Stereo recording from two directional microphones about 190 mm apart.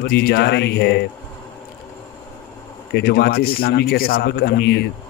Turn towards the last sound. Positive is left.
turn(degrees=60)  # may be behind; listen again after turning